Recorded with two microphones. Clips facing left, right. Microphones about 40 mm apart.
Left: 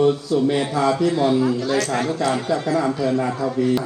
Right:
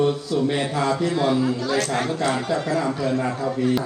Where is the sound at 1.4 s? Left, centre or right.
Left.